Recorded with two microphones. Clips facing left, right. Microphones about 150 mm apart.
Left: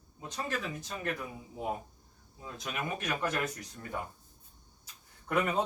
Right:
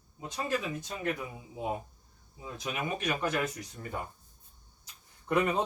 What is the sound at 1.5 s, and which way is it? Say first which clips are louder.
A man's voice: right 2 dB; 10° right (ahead or behind).